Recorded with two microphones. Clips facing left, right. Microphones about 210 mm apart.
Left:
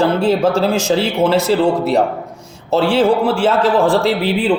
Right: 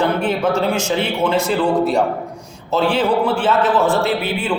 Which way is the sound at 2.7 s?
25° left (ahead or behind).